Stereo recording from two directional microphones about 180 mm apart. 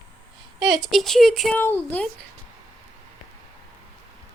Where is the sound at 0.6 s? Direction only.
Centre (ahead or behind).